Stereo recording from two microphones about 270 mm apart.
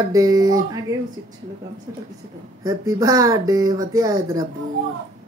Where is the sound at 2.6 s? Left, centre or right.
Centre.